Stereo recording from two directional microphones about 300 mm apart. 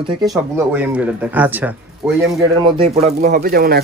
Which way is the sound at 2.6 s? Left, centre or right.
Centre.